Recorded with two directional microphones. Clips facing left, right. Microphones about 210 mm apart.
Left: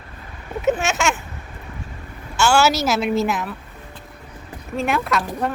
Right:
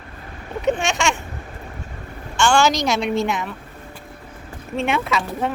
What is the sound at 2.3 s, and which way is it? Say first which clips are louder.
Speech: even; 5° left (ahead or behind).